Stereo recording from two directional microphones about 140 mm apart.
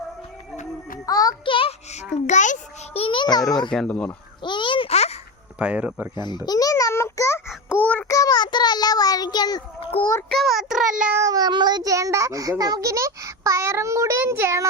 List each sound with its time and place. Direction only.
0.5 s music: 60° left (ahead or behind)
1.0 s music: 25° left (ahead or behind)
1.5 s a sound: 40° left (ahead or behind)
2.1 s a child's voice: 60° left (ahead or behind)
2.9 s a child's voice: 40° left (ahead or behind)
3.7 s child singing: 5° left (ahead or behind)
4.4 s a sound: 35° left (ahead or behind)
5.5 s speech: 10° right (ahead or behind)
6.1 s babbling: 30° left (ahead or behind)
7.8 s child singing: 10° left (ahead or behind)
8.1 s child singing: 25° left (ahead or behind)
10.2 s child singing: centre (ahead or behind)
11.2 s a child's voice: 25° right (ahead or behind)